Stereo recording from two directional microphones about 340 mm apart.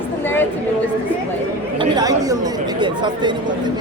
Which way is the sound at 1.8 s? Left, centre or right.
Centre.